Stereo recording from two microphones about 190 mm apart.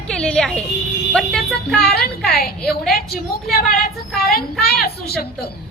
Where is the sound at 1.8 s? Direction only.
55° left (ahead or behind).